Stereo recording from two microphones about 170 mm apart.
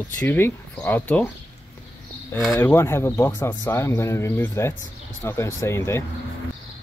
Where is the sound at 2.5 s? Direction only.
15° left (ahead or behind).